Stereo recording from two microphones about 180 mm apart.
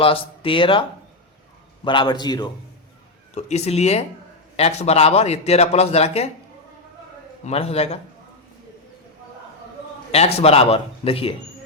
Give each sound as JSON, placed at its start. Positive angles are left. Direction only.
{"t": 0.0, "sound": "speech", "side_deg": 30}
{"t": 3.3, "sound": "a man's voice", "side_deg": 40}
{"t": 7.4, "sound": "a man's voice", "side_deg": 35}
{"t": 10.1, "sound": "a man's voice", "side_deg": 35}